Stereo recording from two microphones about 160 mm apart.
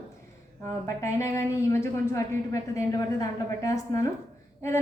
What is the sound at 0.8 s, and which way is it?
A woman's voice, 20° left (ahead or behind).